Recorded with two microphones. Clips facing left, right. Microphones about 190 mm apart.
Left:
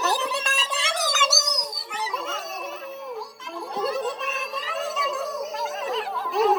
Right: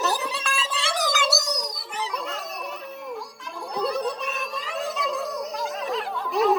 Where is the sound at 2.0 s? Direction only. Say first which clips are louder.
Even; centre (ahead or behind).